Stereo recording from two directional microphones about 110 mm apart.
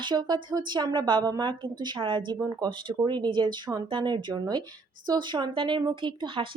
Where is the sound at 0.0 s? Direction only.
40° right (ahead or behind).